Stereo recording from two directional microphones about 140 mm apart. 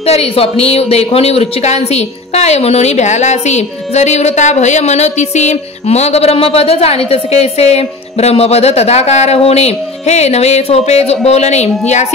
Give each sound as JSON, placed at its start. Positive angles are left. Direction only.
{"t": 0.0, "sound": "speech", "side_deg": 45}